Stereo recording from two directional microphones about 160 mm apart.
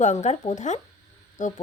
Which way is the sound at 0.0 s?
45° left (ahead or behind).